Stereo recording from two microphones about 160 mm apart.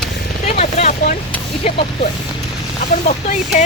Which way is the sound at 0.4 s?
45° left (ahead or behind).